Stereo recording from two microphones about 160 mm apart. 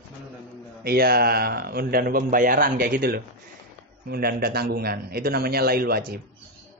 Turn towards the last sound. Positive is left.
turn(degrees=-70)  # may be behind; listen again after turning